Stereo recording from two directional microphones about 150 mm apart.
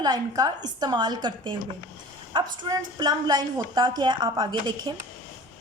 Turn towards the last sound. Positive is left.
turn(degrees=-30)  # may be behind; listen again after turning